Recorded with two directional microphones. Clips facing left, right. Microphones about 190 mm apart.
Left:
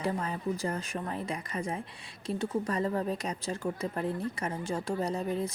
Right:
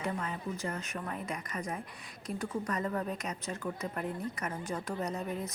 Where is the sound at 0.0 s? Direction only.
35° left (ahead or behind).